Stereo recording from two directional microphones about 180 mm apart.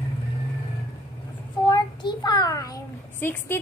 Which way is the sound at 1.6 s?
25° left (ahead or behind).